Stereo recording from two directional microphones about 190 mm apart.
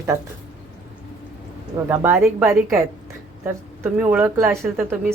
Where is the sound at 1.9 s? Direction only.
10° right (ahead or behind).